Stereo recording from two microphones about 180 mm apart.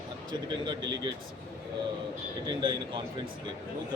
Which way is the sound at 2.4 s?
25° right (ahead or behind).